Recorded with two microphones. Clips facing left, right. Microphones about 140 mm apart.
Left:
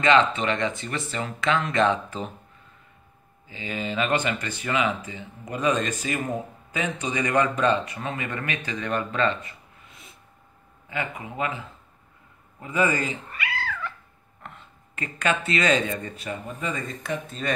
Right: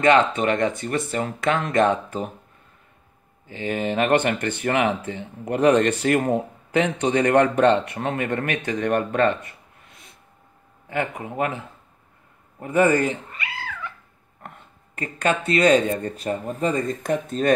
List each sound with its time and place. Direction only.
0.0 s speech: 50° right (ahead or behind)
3.4 s speech: 55° right (ahead or behind)
10.9 s speech: 50° right (ahead or behind)
13.3 s cat: 15° right (ahead or behind)
14.4 s speech: 45° right (ahead or behind)
16.2 s speech: 40° right (ahead or behind)